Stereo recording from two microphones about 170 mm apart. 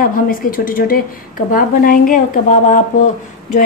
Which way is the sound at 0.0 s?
55° left (ahead or behind).